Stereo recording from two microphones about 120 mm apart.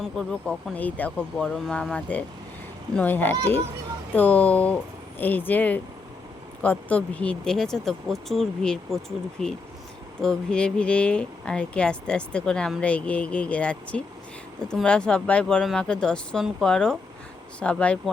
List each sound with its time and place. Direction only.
0.2 s speech: 5° left (ahead or behind)
1.5 s speech: centre (ahead or behind)